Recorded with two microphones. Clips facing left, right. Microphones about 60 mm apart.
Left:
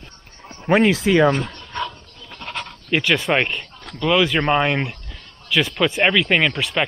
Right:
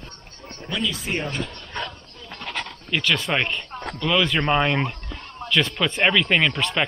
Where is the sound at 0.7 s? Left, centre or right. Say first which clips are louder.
Left 11 dB; left.